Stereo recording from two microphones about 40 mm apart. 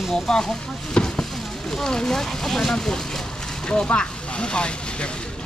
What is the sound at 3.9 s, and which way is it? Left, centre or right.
Speech, left.